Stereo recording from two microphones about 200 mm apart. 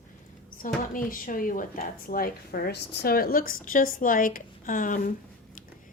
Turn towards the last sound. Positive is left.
turn(degrees=40)  # may be behind; listen again after turning